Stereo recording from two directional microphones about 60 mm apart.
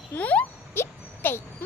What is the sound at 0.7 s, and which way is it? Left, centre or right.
Music, left.